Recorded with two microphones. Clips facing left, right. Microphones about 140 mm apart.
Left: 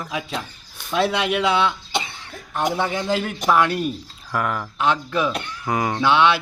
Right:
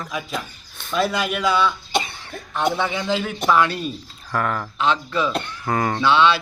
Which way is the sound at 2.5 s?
10° left (ahead or behind).